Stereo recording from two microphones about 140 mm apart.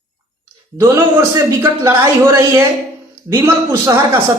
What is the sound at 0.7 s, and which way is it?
A man's voice, 25° right (ahead or behind).